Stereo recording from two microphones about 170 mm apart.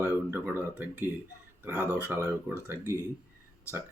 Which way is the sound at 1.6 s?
10° right (ahead or behind).